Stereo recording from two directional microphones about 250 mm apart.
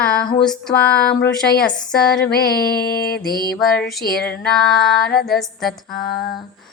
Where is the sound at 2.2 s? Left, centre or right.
Left.